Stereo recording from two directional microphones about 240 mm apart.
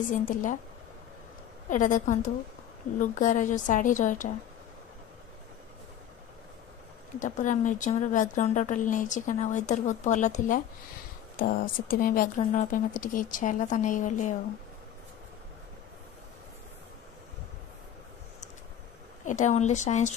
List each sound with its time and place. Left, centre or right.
0.1 s speech: left
1.7 s speech: left
7.2 s speech: left
19.2 s a woman's voice: left